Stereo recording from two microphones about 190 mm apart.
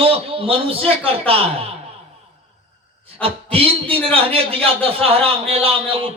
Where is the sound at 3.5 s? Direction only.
30° right (ahead or behind).